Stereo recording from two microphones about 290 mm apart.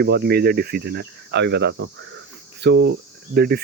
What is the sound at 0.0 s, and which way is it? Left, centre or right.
Speech, right.